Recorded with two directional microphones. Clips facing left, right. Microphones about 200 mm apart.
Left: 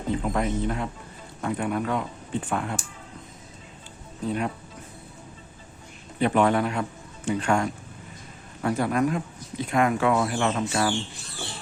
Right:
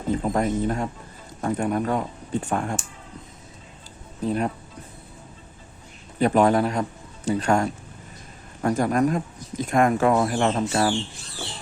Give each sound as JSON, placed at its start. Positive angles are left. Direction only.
{"t": 0.1, "sound": "speech", "side_deg": -40}
{"t": 4.3, "sound": "speech", "side_deg": -35}
{"t": 6.1, "sound": "speech", "side_deg": -40}